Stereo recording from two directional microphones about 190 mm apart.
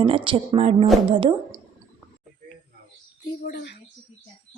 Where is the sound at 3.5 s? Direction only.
55° left (ahead or behind).